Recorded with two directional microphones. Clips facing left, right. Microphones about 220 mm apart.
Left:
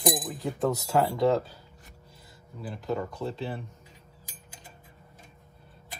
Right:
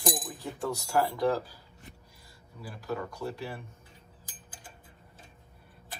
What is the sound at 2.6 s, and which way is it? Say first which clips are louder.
Speech: left 4 dB; 25° left (ahead or behind).